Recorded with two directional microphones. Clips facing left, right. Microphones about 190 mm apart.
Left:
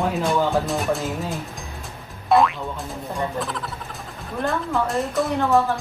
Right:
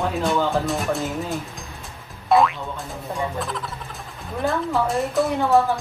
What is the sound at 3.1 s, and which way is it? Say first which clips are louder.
Speech: even; centre (ahead or behind).